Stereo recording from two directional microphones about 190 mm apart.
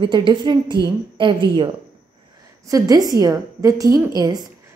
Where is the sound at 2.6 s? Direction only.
20° right (ahead or behind).